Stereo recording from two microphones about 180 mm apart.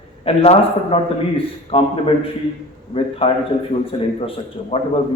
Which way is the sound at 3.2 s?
30° left (ahead or behind).